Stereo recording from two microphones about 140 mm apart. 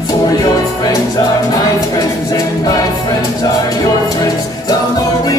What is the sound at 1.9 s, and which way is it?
Music, 25° left (ahead or behind).